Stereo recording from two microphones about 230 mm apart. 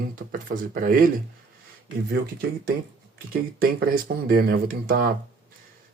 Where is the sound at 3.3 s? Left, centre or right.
Right.